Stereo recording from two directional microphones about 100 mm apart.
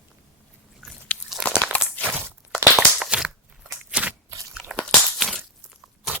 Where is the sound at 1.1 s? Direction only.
10° left (ahead or behind).